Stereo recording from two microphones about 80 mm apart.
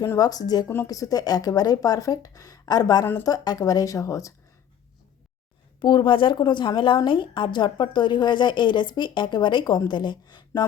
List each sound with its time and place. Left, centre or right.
0.2 s speech: left
5.8 s a woman's voice: left